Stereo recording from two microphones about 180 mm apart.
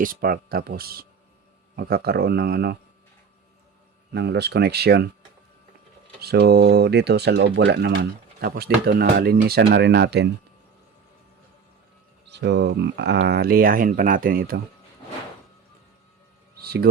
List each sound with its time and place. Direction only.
0.0 s speech: 55° right (ahead or behind)
4.1 s speech: 70° right (ahead or behind)
6.1 s speech: 60° right (ahead or behind)
12.3 s speech: 70° right (ahead or behind); by 14.6 s 55° right (ahead or behind)
16.6 s a sound: 60° right (ahead or behind)